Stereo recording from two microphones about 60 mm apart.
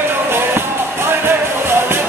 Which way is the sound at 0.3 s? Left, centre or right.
Right.